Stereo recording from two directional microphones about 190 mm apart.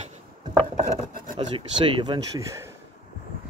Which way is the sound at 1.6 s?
25° right (ahead or behind).